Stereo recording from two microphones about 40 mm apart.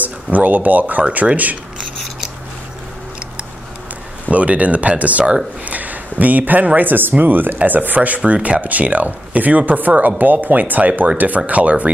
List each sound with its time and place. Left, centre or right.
0.0 s speech: right
4.3 s speech: right